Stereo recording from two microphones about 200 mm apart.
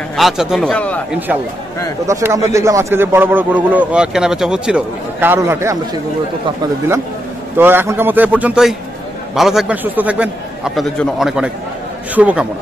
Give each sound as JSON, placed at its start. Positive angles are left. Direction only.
{"t": 0.1, "sound": "a man's voice", "side_deg": 0}
{"t": 2.0, "sound": "a man's voice", "side_deg": -15}
{"t": 7.5, "sound": "a man's voice", "side_deg": -10}